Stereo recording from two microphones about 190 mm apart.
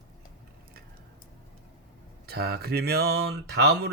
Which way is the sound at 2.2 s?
55° right (ahead or behind).